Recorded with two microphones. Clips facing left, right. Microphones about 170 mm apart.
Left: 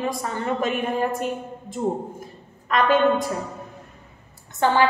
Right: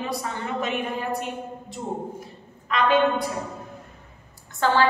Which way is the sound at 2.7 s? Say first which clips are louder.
Left 2 dB; 45° left (ahead or behind).